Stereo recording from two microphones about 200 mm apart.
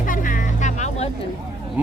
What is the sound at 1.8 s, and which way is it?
Speech, 10° right (ahead or behind).